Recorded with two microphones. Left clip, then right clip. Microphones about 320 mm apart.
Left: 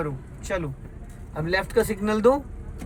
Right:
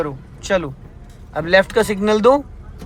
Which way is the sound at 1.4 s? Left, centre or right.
Centre.